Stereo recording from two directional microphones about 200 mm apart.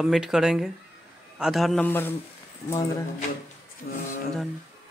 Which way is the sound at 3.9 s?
50° left (ahead or behind).